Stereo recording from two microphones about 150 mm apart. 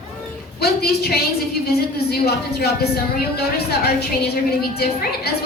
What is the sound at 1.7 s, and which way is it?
A woman's voice, 90° left.